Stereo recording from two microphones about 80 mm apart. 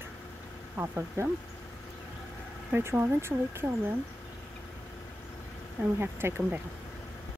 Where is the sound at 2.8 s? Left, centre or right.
Right.